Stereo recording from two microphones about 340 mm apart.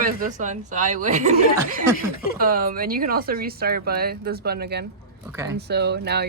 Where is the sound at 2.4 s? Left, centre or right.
Right.